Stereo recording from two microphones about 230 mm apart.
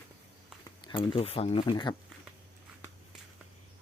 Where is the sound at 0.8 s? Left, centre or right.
Left.